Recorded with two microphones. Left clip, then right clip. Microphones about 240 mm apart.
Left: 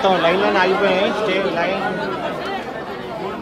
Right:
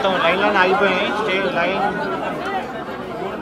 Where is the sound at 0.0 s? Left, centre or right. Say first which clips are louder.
Left 1 dB; left.